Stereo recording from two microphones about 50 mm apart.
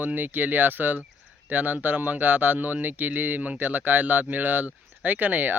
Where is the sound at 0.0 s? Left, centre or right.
Right.